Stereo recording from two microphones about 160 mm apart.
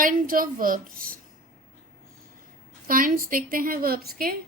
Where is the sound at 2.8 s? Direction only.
60° right (ahead or behind).